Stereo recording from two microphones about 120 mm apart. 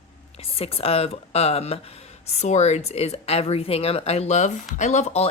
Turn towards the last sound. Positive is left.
turn(degrees=70)  # may be behind; listen again after turning